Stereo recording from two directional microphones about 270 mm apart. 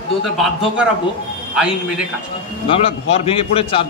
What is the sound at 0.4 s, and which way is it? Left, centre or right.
Speech, centre.